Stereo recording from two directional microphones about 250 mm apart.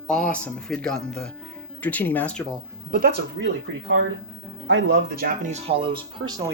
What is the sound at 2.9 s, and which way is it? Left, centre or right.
Speech, right.